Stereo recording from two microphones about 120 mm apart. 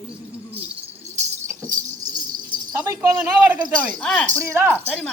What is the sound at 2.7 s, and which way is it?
Speech, 15° right (ahead or behind).